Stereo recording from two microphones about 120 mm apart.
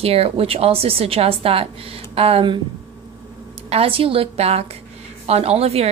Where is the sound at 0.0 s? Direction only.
55° right (ahead or behind).